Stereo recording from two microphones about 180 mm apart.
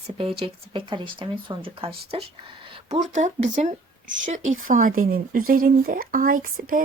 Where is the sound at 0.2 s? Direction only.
30° right (ahead or behind).